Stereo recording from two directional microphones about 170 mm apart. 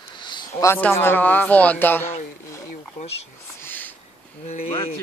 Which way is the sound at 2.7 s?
40° left (ahead or behind).